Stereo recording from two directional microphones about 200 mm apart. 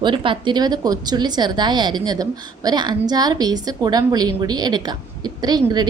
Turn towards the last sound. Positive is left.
turn(degrees=-20)  # may be behind; listen again after turning